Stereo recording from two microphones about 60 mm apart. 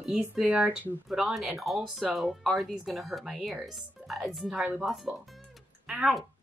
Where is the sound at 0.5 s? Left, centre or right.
Right.